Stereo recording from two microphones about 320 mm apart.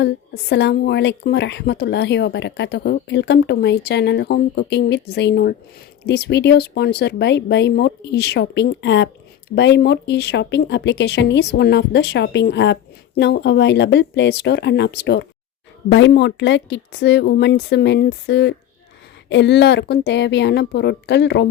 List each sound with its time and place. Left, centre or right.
0.0 s speech: left